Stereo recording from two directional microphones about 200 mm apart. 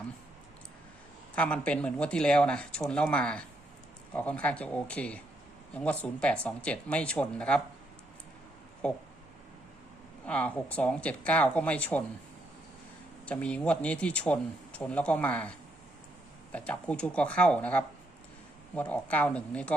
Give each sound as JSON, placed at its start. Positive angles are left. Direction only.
{"t": 1.4, "sound": "speech", "side_deg": 5}
{"t": 8.8, "sound": "speech", "side_deg": 5}
{"t": 10.2, "sound": "speech", "side_deg": 5}
{"t": 13.2, "sound": "speech", "side_deg": 5}